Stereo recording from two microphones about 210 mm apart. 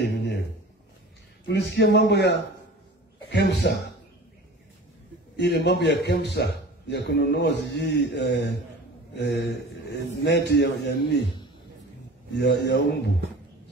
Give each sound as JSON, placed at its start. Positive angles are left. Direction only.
{"t": 0.0, "sound": "a sound", "side_deg": 55}
{"t": 1.5, "sound": "a man's voice", "side_deg": 55}
{"t": 5.3, "sound": "a man's voice", "side_deg": 55}
{"t": 12.4, "sound": "a man's voice", "side_deg": 55}